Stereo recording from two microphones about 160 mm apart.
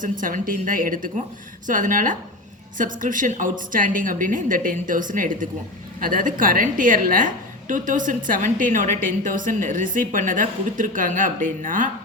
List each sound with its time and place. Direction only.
0.0 s a woman's voice: 55° right (ahead or behind)